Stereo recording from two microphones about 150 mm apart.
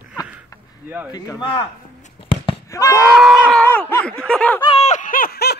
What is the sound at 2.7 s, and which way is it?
Speech, 20° left (ahead or behind).